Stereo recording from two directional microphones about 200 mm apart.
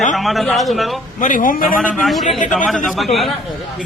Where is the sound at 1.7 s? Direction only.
Centre (ahead or behind).